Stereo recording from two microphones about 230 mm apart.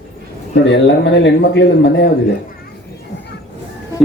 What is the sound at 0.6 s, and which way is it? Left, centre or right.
Speech, left.